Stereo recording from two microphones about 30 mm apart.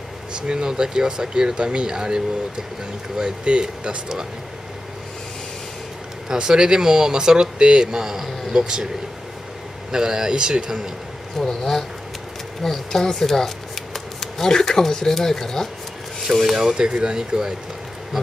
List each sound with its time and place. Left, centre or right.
0.5 s speech: right
6.3 s speech: right
7.9 s a man's voice: centre
8.5 s speech: right
9.8 s speech: right
11.4 s speech: centre
12.6 s speech: centre
13.9 s a sound: centre
14.5 s speech: centre
16.7 s speech: right